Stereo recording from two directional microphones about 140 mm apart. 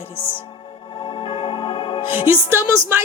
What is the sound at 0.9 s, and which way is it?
Music, 35° left (ahead or behind).